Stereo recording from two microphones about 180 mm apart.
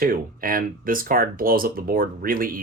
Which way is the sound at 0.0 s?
50° right (ahead or behind).